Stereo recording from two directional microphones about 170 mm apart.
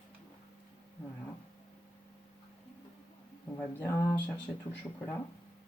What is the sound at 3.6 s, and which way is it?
Speech, 15° left (ahead or behind).